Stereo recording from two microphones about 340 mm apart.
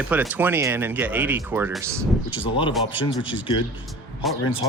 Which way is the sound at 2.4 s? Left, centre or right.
Centre.